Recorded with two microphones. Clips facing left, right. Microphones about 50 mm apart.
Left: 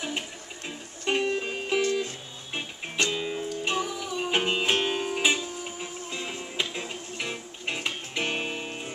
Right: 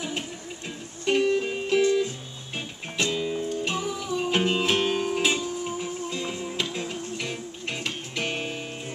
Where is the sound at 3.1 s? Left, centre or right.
Centre.